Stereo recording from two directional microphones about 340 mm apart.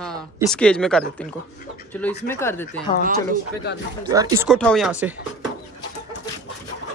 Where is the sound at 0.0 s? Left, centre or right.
Centre.